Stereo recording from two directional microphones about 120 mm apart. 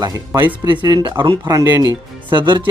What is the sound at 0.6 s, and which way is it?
Speech, 40° right (ahead or behind).